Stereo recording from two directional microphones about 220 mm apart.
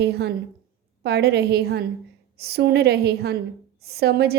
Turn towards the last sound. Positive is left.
turn(degrees=-45)  # may be behind; listen again after turning